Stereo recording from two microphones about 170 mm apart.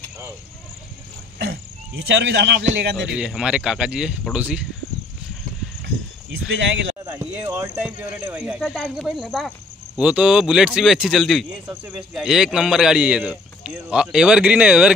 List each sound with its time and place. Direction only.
2.0 s speech: 90° right
3.2 s speech: 5° right (ahead or behind)
7.1 s speech: 15° right (ahead or behind)